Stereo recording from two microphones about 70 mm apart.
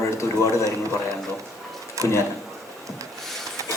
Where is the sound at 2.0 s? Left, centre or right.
Right.